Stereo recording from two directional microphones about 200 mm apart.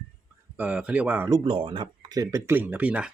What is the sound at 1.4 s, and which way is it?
Speech, 25° right (ahead or behind).